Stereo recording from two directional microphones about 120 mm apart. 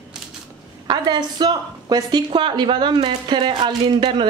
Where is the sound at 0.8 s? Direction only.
40° right (ahead or behind).